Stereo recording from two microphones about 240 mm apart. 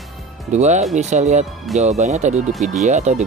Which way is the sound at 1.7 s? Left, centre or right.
Centre.